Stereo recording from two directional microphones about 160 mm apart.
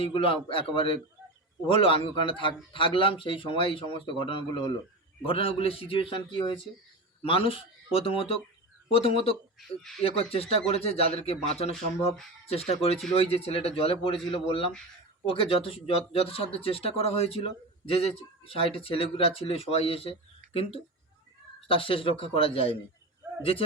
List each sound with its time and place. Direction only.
0.0 s a man's voice: 35° left (ahead or behind)
9.6 s speech: centre (ahead or behind)
10.0 s a man's voice: 35° left (ahead or behind)